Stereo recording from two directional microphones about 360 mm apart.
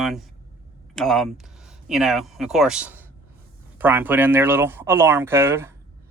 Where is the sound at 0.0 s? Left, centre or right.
Centre.